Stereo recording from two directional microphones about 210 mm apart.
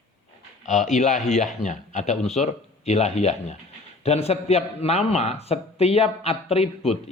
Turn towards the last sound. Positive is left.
turn(degrees=30)  # may be behind; listen again after turning